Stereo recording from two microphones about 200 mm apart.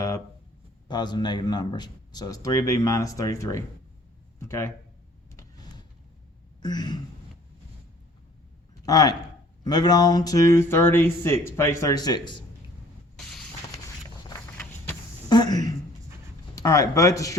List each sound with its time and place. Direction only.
0.9 s speech: 20° left (ahead or behind)
5.4 s vehicle: 20° left (ahead or behind)
6.6 s speech: 20° left (ahead or behind)
8.9 s speech: 20° left (ahead or behind)
15.3 s speech: 20° left (ahead or behind)